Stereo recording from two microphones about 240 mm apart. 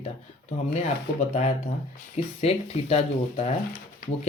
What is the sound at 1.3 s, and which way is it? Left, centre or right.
Speech, left.